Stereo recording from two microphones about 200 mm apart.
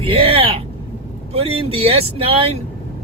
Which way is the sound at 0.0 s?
30° right (ahead or behind).